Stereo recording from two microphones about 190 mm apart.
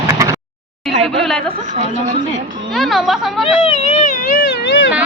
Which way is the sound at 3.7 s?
35° left (ahead or behind).